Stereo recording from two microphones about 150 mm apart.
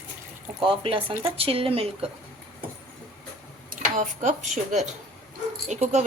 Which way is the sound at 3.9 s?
60° right (ahead or behind).